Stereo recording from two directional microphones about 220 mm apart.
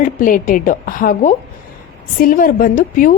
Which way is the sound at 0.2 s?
40° left (ahead or behind).